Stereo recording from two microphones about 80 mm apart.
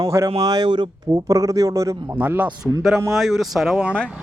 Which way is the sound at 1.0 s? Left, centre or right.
Right.